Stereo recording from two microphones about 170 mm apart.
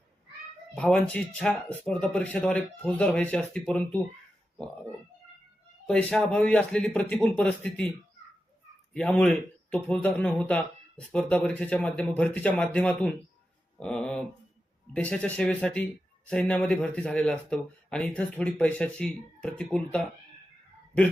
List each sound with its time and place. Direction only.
0.8 s speech: 5° left (ahead or behind)
5.9 s speech: 5° left (ahead or behind)